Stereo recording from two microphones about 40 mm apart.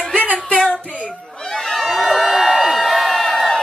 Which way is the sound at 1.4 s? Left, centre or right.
Centre.